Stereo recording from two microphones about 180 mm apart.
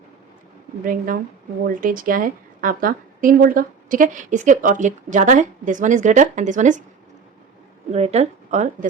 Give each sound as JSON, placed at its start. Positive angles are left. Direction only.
{"t": 0.9, "sound": "a woman's voice", "side_deg": -50}
{"t": 7.9, "sound": "speech", "side_deg": -35}